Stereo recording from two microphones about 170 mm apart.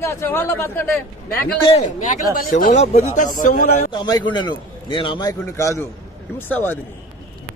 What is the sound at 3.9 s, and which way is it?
A man's voice, 25° left (ahead or behind).